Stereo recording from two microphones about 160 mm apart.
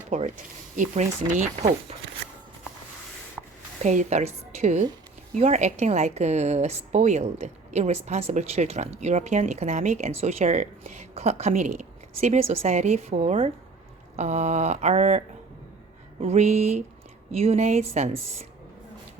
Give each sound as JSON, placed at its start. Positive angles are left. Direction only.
{"t": 0.1, "sound": "a woman's voice", "side_deg": -45}
{"t": 3.4, "sound": "writing", "side_deg": -5}
{"t": 3.8, "sound": "a woman's voice", "side_deg": -45}
{"t": 16.2, "sound": "a woman's voice", "side_deg": -45}